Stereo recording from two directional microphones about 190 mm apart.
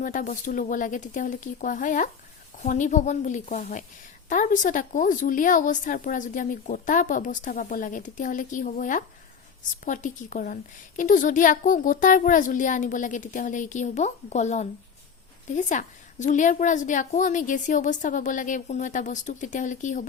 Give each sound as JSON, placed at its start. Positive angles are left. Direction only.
{"t": 0.0, "sound": "a woman's voice", "side_deg": 45}